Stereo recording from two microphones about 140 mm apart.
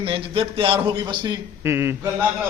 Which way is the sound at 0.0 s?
40° right (ahead or behind).